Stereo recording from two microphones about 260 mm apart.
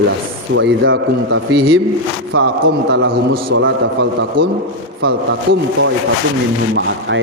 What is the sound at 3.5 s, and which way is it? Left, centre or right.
Speech, right.